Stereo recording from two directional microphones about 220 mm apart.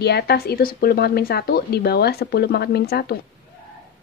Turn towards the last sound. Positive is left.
turn(degrees=45)  # may be behind; listen again after turning